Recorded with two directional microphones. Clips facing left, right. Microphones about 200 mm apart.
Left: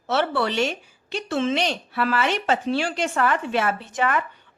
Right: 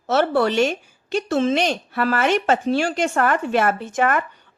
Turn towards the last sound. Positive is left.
turn(degrees=-45)  # may be behind; listen again after turning